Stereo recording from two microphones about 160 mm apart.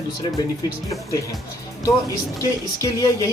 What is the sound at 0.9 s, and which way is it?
Speech, 20° left (ahead or behind).